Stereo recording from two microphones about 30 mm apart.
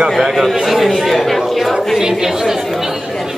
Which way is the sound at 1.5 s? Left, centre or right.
Centre.